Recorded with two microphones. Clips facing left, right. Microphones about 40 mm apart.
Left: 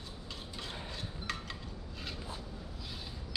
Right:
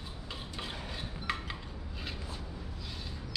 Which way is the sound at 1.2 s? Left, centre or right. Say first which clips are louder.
Right 4 dB; centre.